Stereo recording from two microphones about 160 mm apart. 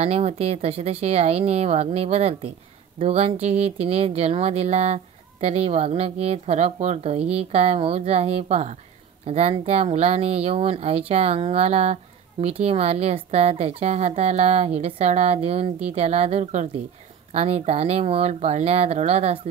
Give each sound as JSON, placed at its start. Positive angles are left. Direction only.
{"t": 0.0, "sound": "speech", "side_deg": -40}